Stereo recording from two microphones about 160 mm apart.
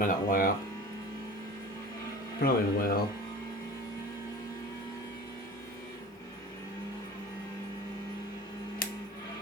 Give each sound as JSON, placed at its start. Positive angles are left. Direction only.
{"t": 0.0, "sound": "speech", "side_deg": 60}
{"t": 2.4, "sound": "speech", "side_deg": 70}